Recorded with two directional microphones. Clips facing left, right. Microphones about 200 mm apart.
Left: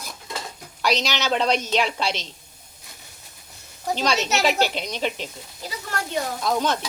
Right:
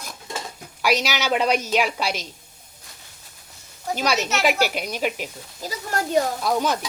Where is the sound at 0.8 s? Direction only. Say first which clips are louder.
Right 1 dB; 10° right (ahead or behind).